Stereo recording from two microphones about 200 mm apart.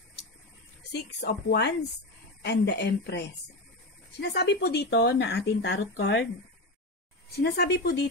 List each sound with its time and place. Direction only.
0.9 s speech: 55° left (ahead or behind)
7.3 s speech: 55° left (ahead or behind)